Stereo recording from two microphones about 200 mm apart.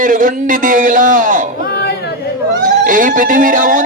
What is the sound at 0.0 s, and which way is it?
Speech, 40° right (ahead or behind).